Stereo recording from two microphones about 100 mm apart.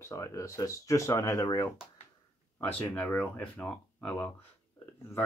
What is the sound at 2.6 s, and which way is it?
Speech, 20° left (ahead or behind).